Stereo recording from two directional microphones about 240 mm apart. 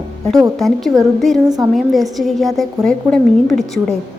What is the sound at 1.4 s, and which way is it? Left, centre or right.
Speech, centre.